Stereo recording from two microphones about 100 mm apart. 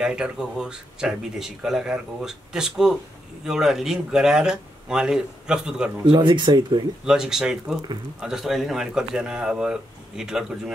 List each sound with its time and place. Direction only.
0.0 s speech: 10° right (ahead or behind)
6.0 s speech: 50° right (ahead or behind)
7.1 s speech: 5° right (ahead or behind)